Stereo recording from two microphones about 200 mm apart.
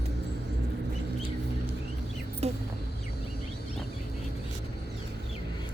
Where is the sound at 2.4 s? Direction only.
30° right (ahead or behind).